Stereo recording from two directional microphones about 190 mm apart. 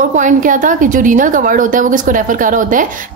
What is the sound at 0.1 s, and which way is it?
A woman's voice, 40° right (ahead or behind).